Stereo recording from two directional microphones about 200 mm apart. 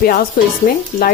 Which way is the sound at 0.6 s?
45° left (ahead or behind).